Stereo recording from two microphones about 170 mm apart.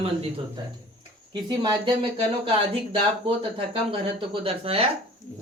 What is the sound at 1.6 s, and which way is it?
Speech, 25° right (ahead or behind).